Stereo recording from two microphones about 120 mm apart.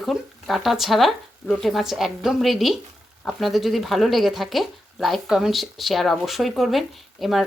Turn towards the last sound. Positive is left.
turn(degrees=0)  # may be behind; listen again after turning